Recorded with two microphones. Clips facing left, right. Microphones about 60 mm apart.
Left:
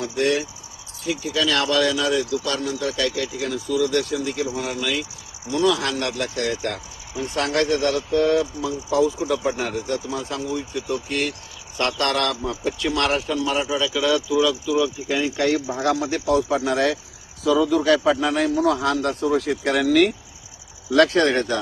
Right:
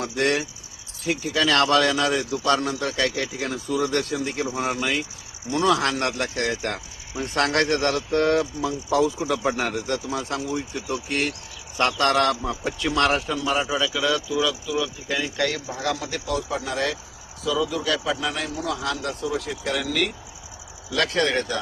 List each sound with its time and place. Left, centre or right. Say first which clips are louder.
0.0 s a man's voice: left 2 dB; right
7.2 s a man's voice: even; right
11.8 s a man's voice: right 1 dB; right
12.5 s speech: left 2 dB; centre
13.2 s speech: left 3 dB; centre
13.5 s speech: right 1 dB; centre
15.8 s a man's voice: left 5 dB; left